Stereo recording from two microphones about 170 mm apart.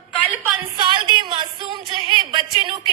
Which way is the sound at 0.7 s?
25° right (ahead or behind).